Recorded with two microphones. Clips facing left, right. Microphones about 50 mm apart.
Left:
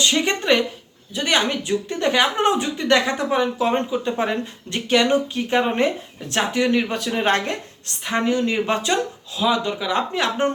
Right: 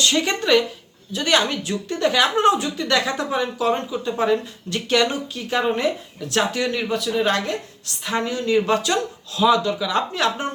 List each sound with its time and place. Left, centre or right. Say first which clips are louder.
0.0 s speech: even; left
6.9 s speech: even; left
8.0 s speech: left 1 dB; left
8.3 s speech: right 2 dB; left
9.3 s speech: right 4 dB; centre